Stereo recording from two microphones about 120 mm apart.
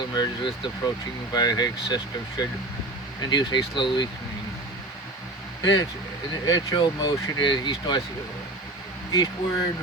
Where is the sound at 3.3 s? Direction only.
40° left (ahead or behind).